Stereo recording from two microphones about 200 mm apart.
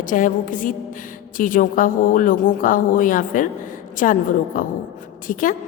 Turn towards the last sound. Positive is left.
turn(degrees=40)  # may be behind; listen again after turning